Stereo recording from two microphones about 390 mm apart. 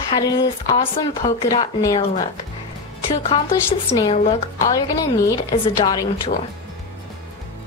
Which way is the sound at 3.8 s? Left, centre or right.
Centre.